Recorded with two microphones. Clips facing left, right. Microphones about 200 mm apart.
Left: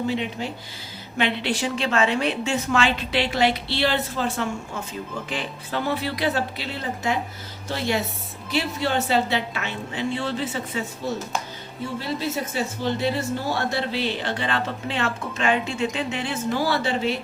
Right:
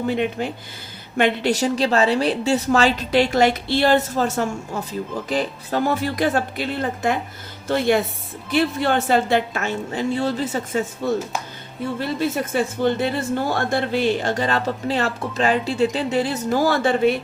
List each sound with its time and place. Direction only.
0.1 s a woman's voice: 55° right (ahead or behind)